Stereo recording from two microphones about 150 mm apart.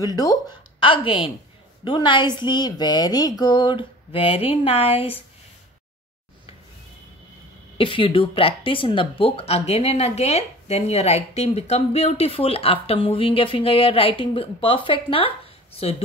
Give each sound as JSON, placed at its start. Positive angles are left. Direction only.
{"t": 0.0, "sound": "speech", "side_deg": 25}
{"t": 7.7, "sound": "speech", "side_deg": 35}